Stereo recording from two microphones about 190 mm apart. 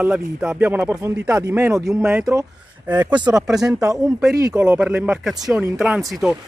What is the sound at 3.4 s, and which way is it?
Speech, centre (ahead or behind).